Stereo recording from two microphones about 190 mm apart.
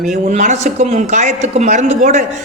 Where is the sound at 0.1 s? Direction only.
40° right (ahead or behind).